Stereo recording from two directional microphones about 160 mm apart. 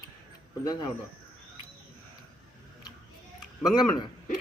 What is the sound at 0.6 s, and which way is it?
Speech, 25° left (ahead or behind).